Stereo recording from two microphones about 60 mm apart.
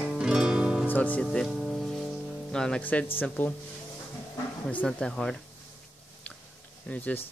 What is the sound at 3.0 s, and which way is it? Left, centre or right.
Speech, left.